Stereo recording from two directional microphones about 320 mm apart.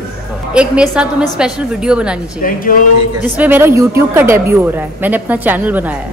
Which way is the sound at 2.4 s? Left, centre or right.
Left.